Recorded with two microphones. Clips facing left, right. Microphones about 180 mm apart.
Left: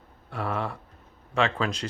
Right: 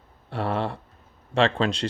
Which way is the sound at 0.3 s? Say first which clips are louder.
Right 4 dB; 30° right (ahead or behind).